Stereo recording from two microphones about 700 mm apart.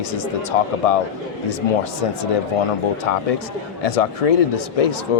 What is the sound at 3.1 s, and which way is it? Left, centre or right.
Speech, left.